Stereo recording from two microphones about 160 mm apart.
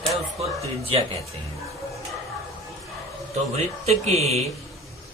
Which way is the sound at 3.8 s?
40° right (ahead or behind).